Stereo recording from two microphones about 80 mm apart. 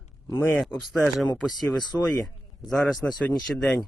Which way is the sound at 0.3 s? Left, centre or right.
Left.